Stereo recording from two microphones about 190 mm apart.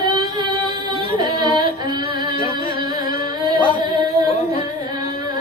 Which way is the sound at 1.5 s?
25° right (ahead or behind).